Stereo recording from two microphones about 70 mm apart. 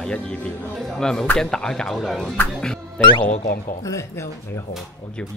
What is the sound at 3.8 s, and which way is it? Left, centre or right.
Speech, left.